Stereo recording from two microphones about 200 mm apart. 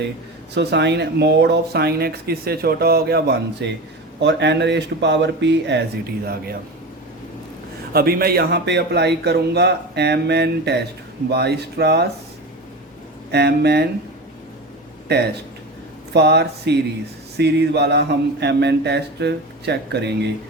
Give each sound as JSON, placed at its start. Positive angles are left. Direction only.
{"t": 0.5, "sound": "speech", "side_deg": -55}
{"t": 7.9, "sound": "speech", "side_deg": -50}
{"t": 13.3, "sound": "speech", "side_deg": -55}
{"t": 16.1, "sound": "speech", "side_deg": -55}